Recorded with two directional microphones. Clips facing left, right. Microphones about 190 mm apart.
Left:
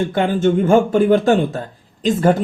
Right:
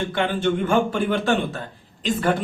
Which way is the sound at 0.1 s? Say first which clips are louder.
Left 6 dB; 45° left (ahead or behind).